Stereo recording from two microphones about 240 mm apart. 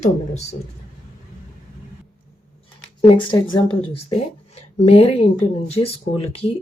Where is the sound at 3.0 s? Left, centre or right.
Left.